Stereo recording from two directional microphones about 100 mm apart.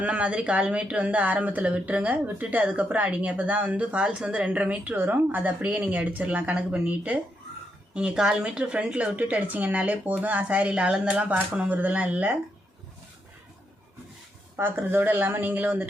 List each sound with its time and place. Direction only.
0.0 s speech: 10° right (ahead or behind)
14.5 s speech: 20° right (ahead or behind)